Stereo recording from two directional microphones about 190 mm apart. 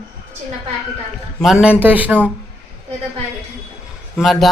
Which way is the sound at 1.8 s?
10° right (ahead or behind).